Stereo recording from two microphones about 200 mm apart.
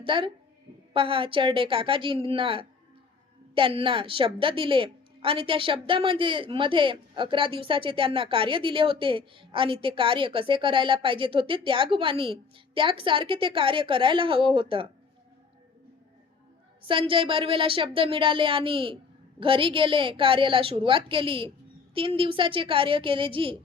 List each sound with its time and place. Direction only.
0.0 s a woman's voice: 25° right (ahead or behind)
16.8 s a woman's voice: 25° right (ahead or behind)